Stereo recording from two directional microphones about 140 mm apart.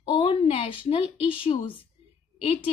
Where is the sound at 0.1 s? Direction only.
40° left (ahead or behind).